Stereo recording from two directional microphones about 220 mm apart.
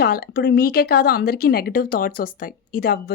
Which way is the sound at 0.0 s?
45° left (ahead or behind).